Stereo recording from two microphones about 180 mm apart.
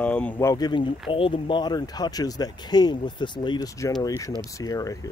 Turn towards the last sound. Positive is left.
turn(degrees=20)  # may be behind; listen again after turning